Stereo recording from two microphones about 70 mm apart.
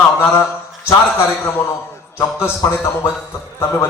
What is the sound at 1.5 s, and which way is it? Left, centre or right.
A man's voice, left.